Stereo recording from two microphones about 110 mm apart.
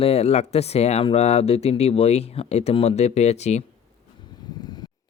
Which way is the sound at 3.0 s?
80° left.